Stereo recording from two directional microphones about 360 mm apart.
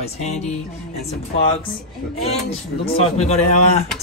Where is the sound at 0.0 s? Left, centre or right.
Centre.